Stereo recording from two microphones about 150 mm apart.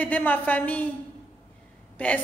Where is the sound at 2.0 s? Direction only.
10° left (ahead or behind).